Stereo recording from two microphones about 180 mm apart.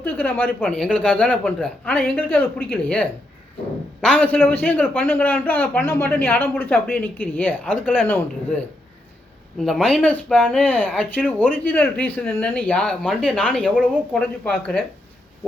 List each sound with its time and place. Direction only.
0.0 s a man's voice: 10° left (ahead or behind)